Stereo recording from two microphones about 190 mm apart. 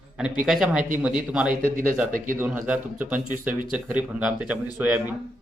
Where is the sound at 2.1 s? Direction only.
45° right (ahead or behind).